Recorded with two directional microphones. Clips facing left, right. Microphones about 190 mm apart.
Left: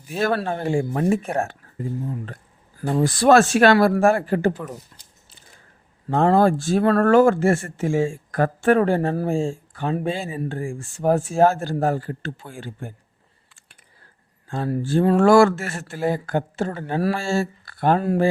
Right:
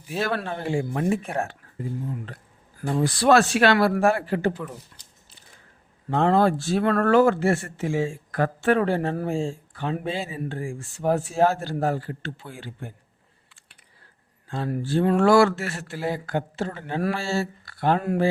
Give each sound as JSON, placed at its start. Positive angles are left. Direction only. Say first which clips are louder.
{"t": 0.2, "sound": "speech", "louder": "left 5 dB", "side_deg": 45}
{"t": 2.8, "sound": "speech", "louder": "left 3 dB", "side_deg": 50}
{"t": 6.1, "sound": "speech", "louder": "left 3 dB", "side_deg": 45}
{"t": 14.4, "sound": "a sound", "louder": "left 3 dB", "side_deg": 45}
{"t": 14.8, "sound": "speech", "louder": "left 3 dB", "side_deg": 45}